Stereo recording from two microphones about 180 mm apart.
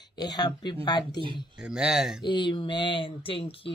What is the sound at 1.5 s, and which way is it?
Speech, 5° right (ahead or behind).